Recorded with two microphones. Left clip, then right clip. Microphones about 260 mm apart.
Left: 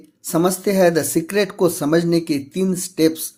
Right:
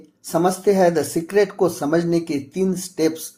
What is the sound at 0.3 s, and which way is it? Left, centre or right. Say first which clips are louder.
Speech: right 1 dB; left.